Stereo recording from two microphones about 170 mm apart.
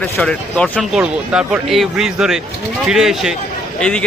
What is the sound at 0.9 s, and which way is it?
Speech, 5° right (ahead or behind).